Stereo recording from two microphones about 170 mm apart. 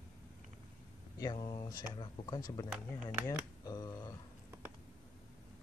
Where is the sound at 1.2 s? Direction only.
25° left (ahead or behind).